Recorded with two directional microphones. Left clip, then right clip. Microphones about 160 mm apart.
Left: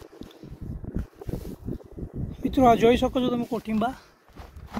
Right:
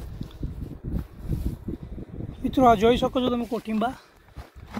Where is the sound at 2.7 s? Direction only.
20° left (ahead or behind).